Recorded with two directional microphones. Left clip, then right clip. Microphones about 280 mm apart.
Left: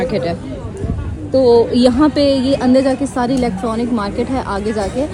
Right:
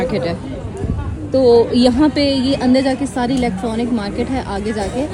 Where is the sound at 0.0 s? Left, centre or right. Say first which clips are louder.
Left 1 dB; centre.